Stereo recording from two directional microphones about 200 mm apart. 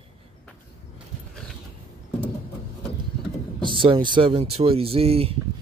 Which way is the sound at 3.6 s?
25° right (ahead or behind).